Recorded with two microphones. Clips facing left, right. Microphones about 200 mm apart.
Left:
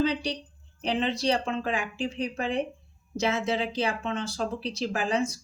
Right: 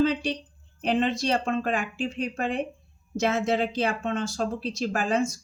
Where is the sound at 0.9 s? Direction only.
50° right (ahead or behind).